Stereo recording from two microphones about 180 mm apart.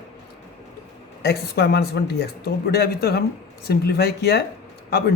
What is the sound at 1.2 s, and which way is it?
A man's voice, 60° left (ahead or behind).